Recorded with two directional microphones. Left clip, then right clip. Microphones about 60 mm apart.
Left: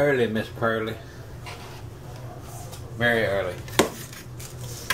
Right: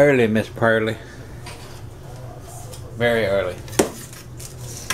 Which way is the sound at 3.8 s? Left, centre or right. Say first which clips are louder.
Right 2 dB; centre.